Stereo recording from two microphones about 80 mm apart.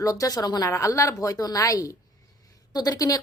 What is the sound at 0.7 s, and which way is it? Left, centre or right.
A woman's voice, left.